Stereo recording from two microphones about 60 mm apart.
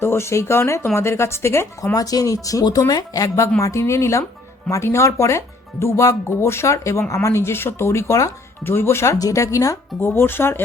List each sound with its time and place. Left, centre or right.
0.0 s speech: left
8.6 s speech: left
9.1 s speech: left
10.0 s speech: left